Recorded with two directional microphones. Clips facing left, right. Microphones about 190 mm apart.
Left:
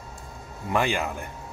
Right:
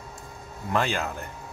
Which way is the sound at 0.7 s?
15° left (ahead or behind).